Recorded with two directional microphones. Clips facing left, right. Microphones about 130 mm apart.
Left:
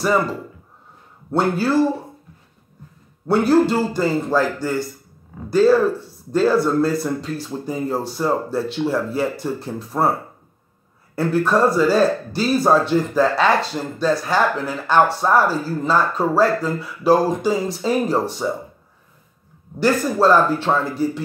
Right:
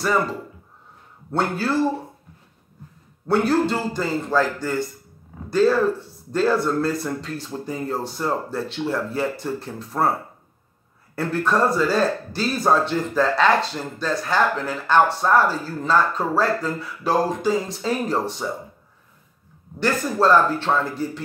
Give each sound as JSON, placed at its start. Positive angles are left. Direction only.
{"t": 1.3, "sound": "a man's voice", "side_deg": 10}
{"t": 3.3, "sound": "a man's voice", "side_deg": 5}
{"t": 11.1, "sound": "a man's voice", "side_deg": 5}
{"t": 19.8, "sound": "a man's voice", "side_deg": 10}